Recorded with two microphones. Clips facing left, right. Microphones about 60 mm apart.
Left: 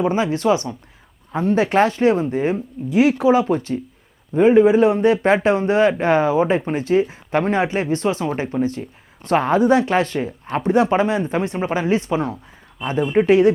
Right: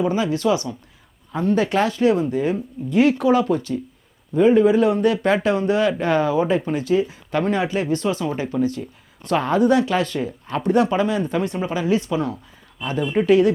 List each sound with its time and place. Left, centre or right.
0.0 s speech: left
2.9 s speech: centre
3.2 s speech: centre
3.5 s speech: left